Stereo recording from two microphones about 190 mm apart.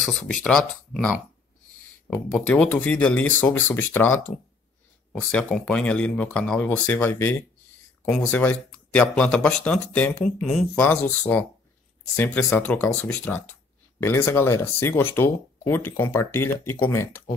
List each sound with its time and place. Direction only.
0.2 s speech: 5° left (ahead or behind)
5.3 s speech: 5° left (ahead or behind)